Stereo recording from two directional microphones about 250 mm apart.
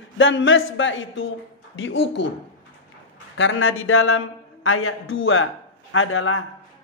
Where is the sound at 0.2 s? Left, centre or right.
Left.